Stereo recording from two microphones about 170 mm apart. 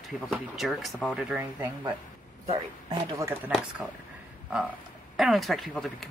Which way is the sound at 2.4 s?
35° right (ahead or behind).